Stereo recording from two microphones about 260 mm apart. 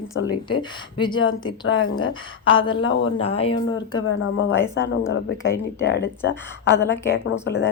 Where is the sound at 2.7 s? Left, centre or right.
Left.